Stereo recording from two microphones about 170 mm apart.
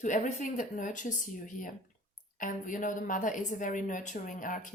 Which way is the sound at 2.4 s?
50° left (ahead or behind).